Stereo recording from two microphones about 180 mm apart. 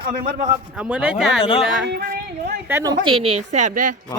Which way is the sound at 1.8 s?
65° right (ahead or behind).